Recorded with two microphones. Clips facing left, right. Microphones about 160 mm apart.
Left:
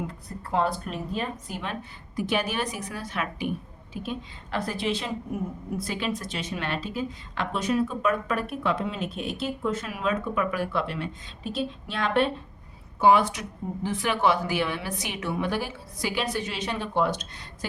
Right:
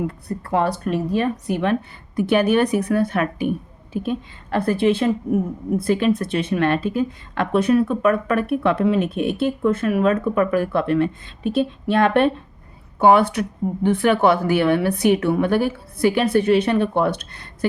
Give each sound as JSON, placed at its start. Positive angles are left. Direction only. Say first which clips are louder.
{"t": 0.3, "sound": "a woman's voice", "louder": "right 5 dB", "side_deg": -70}
{"t": 4.5, "sound": "a woman's voice", "louder": "right 10 dB", "side_deg": -55}